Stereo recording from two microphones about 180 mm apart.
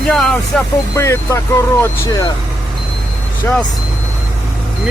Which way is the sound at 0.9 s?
15° left (ahead or behind).